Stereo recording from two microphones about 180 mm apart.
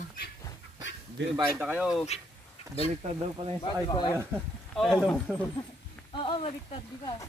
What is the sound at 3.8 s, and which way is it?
Speech, 25° left (ahead or behind).